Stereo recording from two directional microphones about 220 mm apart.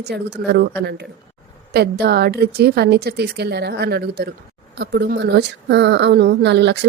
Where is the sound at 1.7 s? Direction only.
45° right (ahead or behind).